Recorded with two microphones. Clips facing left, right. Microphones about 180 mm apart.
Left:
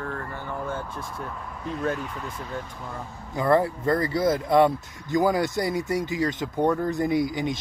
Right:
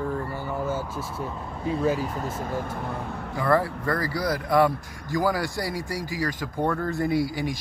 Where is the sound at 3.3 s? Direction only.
20° left (ahead or behind).